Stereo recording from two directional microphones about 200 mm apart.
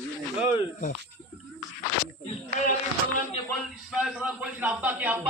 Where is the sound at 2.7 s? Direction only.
40° left (ahead or behind).